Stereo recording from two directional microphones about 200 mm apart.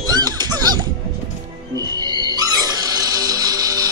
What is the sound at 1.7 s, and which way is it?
Music, 20° right (ahead or behind).